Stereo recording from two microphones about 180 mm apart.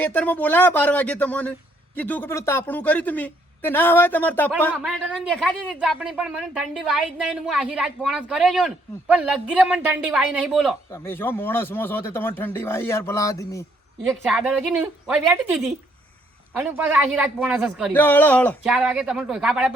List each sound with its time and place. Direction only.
0.0 s speech: 10° left (ahead or behind)
4.8 s speech: 5° right (ahead or behind)
10.9 s speech: 15° left (ahead or behind)
14.0 s speech: centre (ahead or behind)
17.9 s speech: 10° left (ahead or behind)
18.6 s speech: 5° right (ahead or behind)